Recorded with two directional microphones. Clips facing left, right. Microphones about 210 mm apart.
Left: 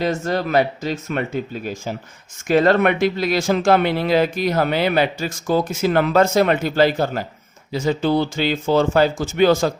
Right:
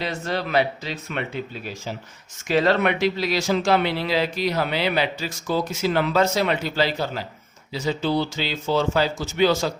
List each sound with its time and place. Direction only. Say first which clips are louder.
0.0 s speech: left 6 dB; 45° left (ahead or behind)